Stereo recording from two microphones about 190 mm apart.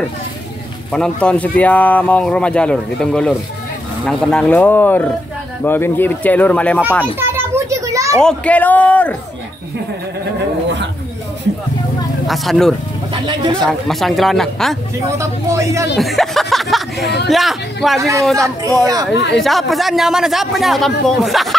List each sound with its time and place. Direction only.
0.9 s speech: 5° left (ahead or behind)
7.2 s a sound: 15° right (ahead or behind)
8.2 s speech: 5° left (ahead or behind)
12.3 s speech: centre (ahead or behind)
13.1 s speech: 25° right (ahead or behind)
13.6 s speech: centre (ahead or behind)
15.0 s speech: 15° right (ahead or behind)
16.0 s speech: centre (ahead or behind)
18.4 s speech: 15° right (ahead or behind)
19.1 s speech: 65° left (ahead or behind)
19.4 s speech: centre (ahead or behind)